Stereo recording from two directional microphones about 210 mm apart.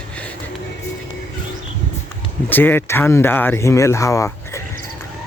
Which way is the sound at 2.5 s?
10° left (ahead or behind).